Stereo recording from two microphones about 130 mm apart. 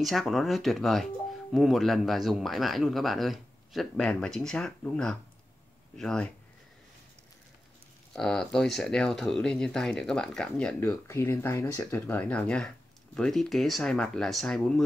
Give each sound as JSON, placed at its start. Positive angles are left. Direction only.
{"t": 0.0, "sound": "speech", "side_deg": 0}
{"t": 8.1, "sound": "speech", "side_deg": 5}
{"t": 10.8, "sound": "speech", "side_deg": 20}
{"t": 12.1, "sound": "speech", "side_deg": 10}